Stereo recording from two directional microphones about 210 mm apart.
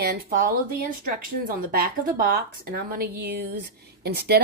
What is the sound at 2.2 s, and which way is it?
A woman's voice, 45° right (ahead or behind).